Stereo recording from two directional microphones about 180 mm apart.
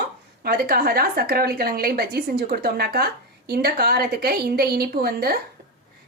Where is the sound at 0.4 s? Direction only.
55° right (ahead or behind).